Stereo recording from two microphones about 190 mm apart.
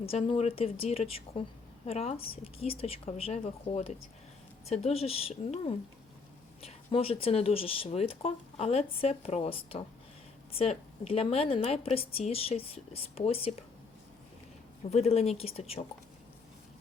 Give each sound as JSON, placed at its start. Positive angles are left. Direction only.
{"t": 0.0, "sound": "speech", "side_deg": 30}
{"t": 14.8, "sound": "speech", "side_deg": 35}